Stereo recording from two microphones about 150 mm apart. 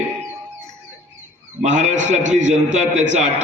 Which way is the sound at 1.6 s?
55° right (ahead or behind).